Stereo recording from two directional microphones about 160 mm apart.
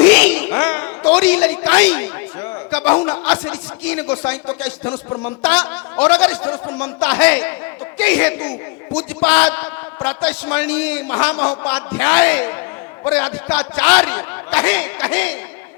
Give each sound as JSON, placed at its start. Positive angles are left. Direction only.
{"t": 0.0, "sound": "a woman's voice", "side_deg": 5}